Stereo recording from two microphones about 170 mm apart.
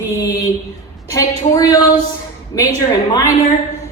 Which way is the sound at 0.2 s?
20° left (ahead or behind).